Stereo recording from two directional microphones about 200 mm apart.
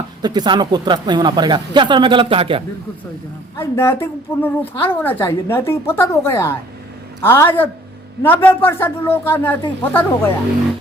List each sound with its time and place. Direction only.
0.2 s speech: 20° right (ahead or behind)
3.6 s a woman's voice: 10° left (ahead or behind)